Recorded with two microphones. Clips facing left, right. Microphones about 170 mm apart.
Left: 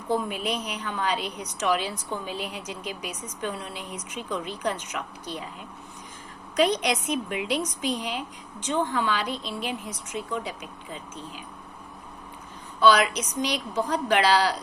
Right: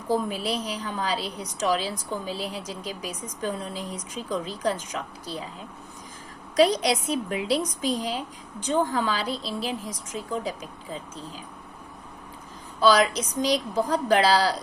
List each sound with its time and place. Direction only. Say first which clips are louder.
0.1 s speech: right 1 dB; 35° right (ahead or behind)
12.8 s speech: even; 35° right (ahead or behind)